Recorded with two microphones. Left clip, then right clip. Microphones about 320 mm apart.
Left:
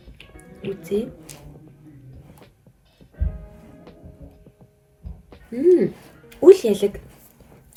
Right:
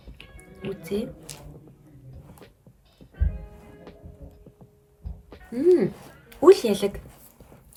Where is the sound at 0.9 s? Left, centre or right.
Right.